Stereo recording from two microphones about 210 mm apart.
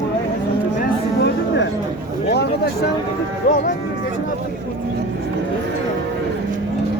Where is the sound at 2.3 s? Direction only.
50° left (ahead or behind).